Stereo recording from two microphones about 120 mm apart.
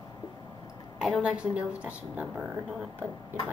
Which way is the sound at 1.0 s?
5° right (ahead or behind).